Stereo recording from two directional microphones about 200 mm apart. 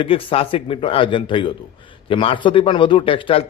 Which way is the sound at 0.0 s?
25° left (ahead or behind).